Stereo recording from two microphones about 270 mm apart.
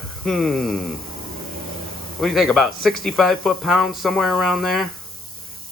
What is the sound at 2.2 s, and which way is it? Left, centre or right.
Speech, centre.